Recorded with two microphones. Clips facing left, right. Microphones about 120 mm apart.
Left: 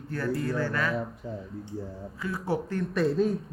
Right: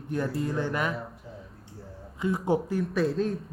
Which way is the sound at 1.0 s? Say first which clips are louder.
Left 6 dB; centre (ahead or behind).